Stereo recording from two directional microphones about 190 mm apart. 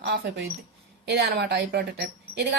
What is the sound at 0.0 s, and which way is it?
A woman's voice, 65° right (ahead or behind).